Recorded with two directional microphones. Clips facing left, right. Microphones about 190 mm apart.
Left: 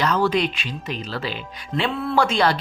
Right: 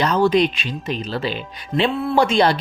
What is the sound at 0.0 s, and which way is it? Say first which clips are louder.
Speech: right 4 dB; 20° right (ahead or behind).